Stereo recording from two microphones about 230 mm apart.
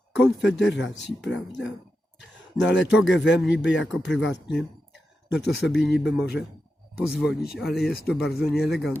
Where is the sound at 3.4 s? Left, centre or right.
Left.